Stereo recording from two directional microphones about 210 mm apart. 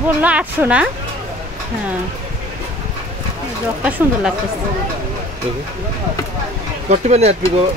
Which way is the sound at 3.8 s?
5° right (ahead or behind).